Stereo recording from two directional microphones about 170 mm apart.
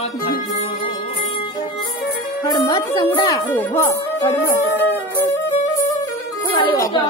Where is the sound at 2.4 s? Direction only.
25° left (ahead or behind).